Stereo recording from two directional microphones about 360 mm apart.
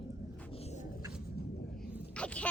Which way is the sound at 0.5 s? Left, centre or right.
Centre.